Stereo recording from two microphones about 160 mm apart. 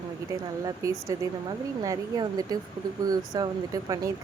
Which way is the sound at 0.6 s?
20° right (ahead or behind).